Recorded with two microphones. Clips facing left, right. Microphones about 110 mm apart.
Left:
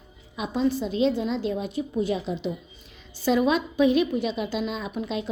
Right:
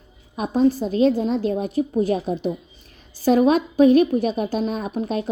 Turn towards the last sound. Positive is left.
turn(degrees=-45)  # may be behind; listen again after turning